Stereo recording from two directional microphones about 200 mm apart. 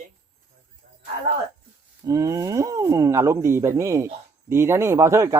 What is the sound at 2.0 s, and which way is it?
Speech, 15° right (ahead or behind).